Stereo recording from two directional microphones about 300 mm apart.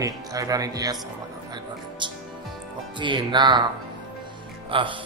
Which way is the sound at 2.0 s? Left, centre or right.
Centre.